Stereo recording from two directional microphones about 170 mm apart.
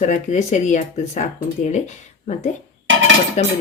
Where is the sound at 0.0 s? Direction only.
45° left (ahead or behind).